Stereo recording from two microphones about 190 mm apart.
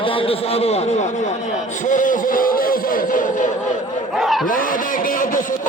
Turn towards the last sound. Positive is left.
turn(degrees=45)  # may be behind; listen again after turning